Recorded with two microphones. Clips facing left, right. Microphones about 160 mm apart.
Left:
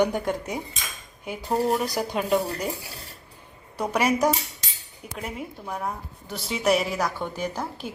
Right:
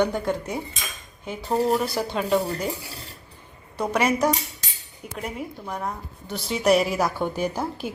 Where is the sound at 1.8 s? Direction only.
15° left (ahead or behind).